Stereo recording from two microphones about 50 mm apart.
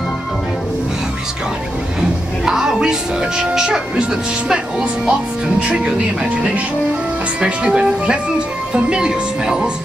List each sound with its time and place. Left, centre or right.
2.0 s speech: centre
5.6 s speech: right